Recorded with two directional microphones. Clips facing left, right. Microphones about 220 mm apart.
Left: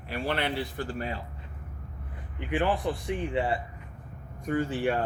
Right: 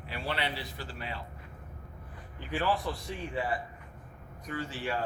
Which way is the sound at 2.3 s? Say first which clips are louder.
Left 4 dB; 20° left (ahead or behind).